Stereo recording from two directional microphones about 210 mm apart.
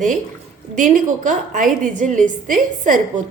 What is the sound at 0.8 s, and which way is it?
A woman's voice, 35° right (ahead or behind).